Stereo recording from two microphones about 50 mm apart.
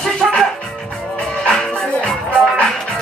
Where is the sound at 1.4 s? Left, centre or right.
Centre.